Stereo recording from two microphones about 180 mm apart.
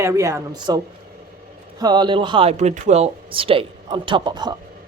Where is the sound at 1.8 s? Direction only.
25° right (ahead or behind).